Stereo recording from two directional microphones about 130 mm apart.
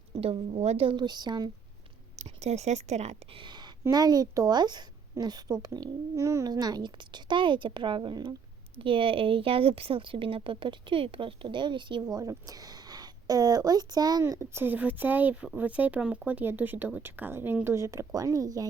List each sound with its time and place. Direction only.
0.2 s a woman's voice: 50° right (ahead or behind)
0.9 s a woman's voice: 35° right (ahead or behind)
2.1 s speech: 55° right (ahead or behind)
3.3 s a woman's voice: 35° right (ahead or behind)